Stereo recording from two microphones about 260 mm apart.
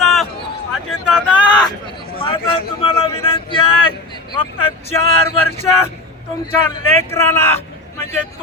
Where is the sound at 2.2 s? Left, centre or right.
Centre.